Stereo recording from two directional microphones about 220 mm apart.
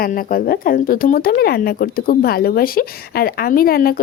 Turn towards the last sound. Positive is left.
turn(degrees=40)  # may be behind; listen again after turning